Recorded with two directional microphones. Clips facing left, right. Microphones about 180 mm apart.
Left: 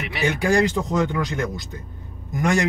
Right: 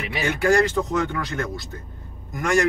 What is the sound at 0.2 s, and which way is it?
Speech, 15° left (ahead or behind).